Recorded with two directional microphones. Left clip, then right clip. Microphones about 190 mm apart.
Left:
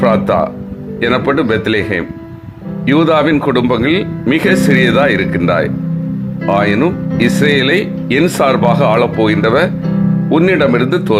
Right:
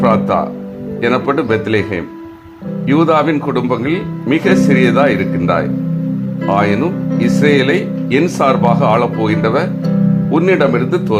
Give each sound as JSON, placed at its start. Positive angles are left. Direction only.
{"t": 0.0, "sound": "music", "side_deg": 15}
{"t": 1.0, "sound": "speech", "side_deg": 15}
{"t": 6.4, "sound": "speech", "side_deg": 15}